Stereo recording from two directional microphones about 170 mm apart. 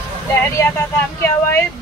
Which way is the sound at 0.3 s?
15° left (ahead or behind).